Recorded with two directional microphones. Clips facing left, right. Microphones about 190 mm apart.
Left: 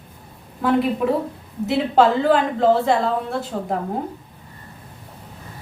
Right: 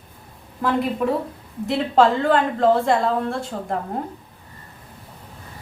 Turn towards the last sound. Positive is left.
turn(degrees=5)  # may be behind; listen again after turning